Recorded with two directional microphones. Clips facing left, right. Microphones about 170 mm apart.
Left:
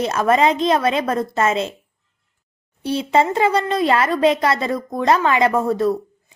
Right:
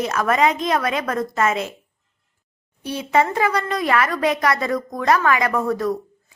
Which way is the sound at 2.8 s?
30° left (ahead or behind).